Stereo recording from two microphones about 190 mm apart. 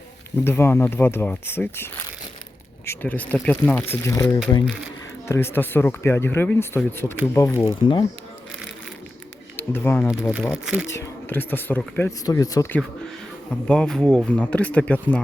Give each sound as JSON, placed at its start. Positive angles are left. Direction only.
{"t": 0.3, "sound": "speech", "side_deg": 15}
{"t": 9.6, "sound": "speech", "side_deg": 10}
{"t": 10.5, "sound": "speech", "side_deg": -5}
{"t": 10.8, "sound": "speech", "side_deg": 15}
{"t": 13.7, "sound": "speech", "side_deg": 5}